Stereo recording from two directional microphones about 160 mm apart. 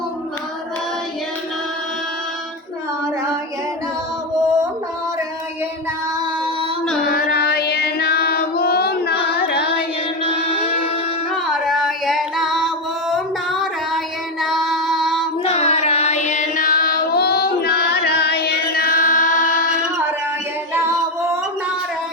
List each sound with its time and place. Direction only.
7.0 s music: 70° left (ahead or behind); by 9.6 s 90° left
11.4 s music: centre (ahead or behind)
13.1 s a sound: centre (ahead or behind)
14.4 s music: centre (ahead or behind)
15.4 s child singing: 40° left (ahead or behind); by 19.5 s 55° left (ahead or behind)